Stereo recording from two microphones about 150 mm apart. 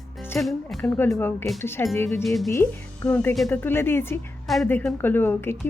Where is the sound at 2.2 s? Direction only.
Centre (ahead or behind).